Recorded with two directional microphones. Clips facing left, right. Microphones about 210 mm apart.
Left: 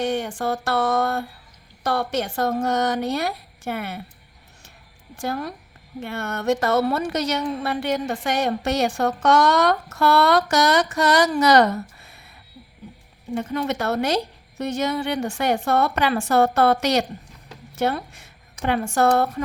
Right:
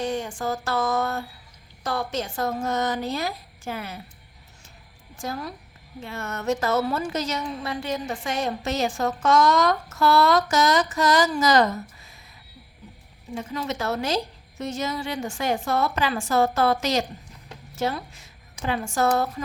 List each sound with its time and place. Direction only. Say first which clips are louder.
0.0 s a woman's voice: left 3 dB; 65° left (ahead or behind)
5.1 s a woman's voice: left 4 dB; 60° left (ahead or behind)
13.3 s a woman's voice: left 5 dB; 60° left (ahead or behind)